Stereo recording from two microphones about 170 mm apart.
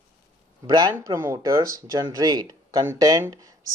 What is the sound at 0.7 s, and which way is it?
Speech, 25° right (ahead or behind).